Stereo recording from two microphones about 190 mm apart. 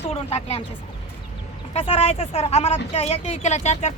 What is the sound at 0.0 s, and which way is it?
Speech, 35° left (ahead or behind).